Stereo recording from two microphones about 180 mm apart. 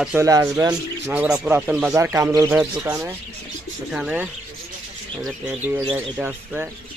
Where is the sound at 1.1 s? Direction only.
5° right (ahead or behind).